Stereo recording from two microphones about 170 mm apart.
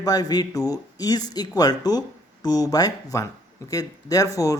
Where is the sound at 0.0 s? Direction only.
20° left (ahead or behind).